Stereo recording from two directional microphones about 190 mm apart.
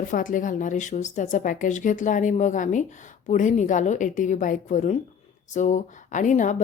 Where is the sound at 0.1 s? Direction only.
45° left (ahead or behind).